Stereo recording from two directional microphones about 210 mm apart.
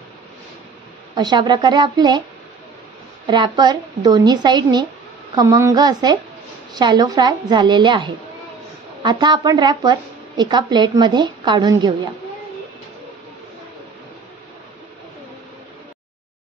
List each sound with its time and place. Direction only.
1.1 s a woman's voice: 20° right (ahead or behind)
3.3 s a woman's voice: 20° right (ahead or behind)